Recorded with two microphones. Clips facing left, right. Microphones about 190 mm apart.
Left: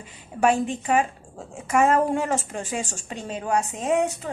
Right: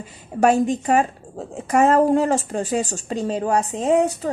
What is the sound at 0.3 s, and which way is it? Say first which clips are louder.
A woman's voice: right 4 dB; 40° right (ahead or behind).